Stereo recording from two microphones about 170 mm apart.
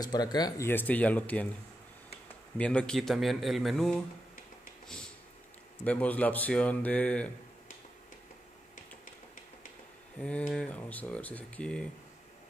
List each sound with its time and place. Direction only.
0.0 s speech: 25° left (ahead or behind)
2.5 s speech: 5° left (ahead or behind)
5.9 s speech: 10° left (ahead or behind)
10.5 s speech: 5° left (ahead or behind)